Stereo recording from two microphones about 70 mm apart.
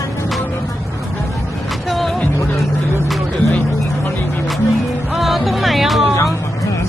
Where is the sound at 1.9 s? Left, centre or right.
Centre.